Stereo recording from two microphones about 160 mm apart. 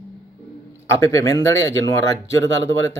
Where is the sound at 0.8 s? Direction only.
20° left (ahead or behind).